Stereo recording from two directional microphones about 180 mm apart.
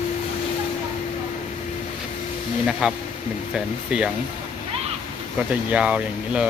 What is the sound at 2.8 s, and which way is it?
Speech, 5° right (ahead or behind).